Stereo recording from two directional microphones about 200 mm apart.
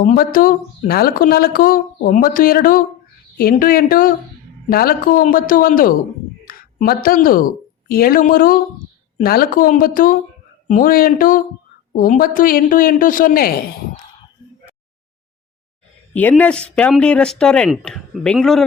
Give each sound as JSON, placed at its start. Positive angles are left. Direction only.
{"t": 0.0, "sound": "speech", "side_deg": 45}
{"t": 6.4, "sound": "a sound", "side_deg": 45}
{"t": 7.9, "sound": "speech", "side_deg": 45}
{"t": 16.3, "sound": "speech", "side_deg": 5}